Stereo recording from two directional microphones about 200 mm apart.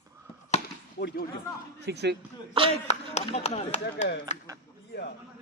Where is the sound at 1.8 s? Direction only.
55° right (ahead or behind).